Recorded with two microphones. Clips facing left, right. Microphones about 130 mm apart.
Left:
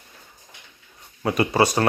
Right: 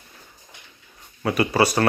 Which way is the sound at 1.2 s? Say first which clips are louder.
Even; 25° left (ahead or behind).